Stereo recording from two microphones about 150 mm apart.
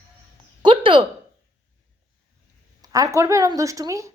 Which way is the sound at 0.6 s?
30° right (ahead or behind).